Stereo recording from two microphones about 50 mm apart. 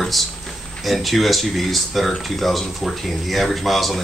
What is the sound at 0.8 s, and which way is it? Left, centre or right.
Speech, centre.